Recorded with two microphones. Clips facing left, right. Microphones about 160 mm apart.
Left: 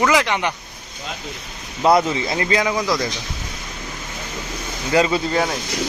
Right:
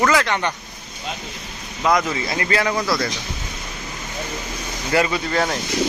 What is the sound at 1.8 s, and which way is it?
Speech, 35° left (ahead or behind).